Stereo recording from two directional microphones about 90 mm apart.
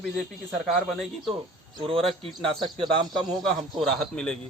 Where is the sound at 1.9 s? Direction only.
90° right.